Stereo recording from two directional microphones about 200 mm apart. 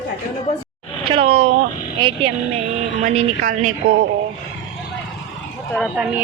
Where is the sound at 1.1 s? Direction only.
30° right (ahead or behind).